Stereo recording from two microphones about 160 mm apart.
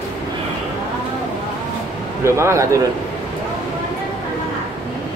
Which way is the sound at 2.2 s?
15° right (ahead or behind).